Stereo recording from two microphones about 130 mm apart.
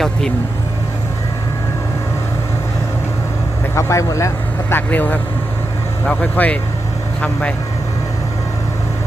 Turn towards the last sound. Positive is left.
turn(degrees=10)  # may be behind; listen again after turning